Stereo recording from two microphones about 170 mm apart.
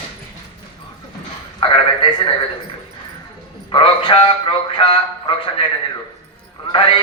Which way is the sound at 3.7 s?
30° left (ahead or behind).